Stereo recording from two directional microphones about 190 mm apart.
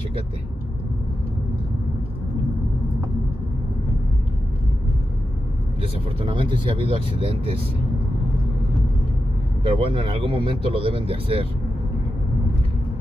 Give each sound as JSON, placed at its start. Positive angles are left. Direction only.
{"t": 5.8, "sound": "speech", "side_deg": -25}
{"t": 9.6, "sound": "speech", "side_deg": -30}